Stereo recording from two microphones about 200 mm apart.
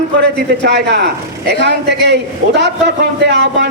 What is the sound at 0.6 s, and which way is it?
A man's voice, 55° right (ahead or behind).